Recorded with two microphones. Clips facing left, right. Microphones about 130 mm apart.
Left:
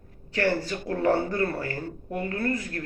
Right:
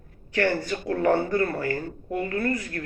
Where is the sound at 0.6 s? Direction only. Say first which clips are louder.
Right 2 dB; 30° left (ahead or behind).